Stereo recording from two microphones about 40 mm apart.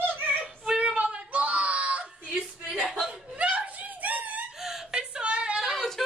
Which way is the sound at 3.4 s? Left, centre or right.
Right.